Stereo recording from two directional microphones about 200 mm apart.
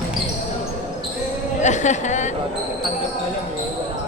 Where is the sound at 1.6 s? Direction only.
35° left (ahead or behind).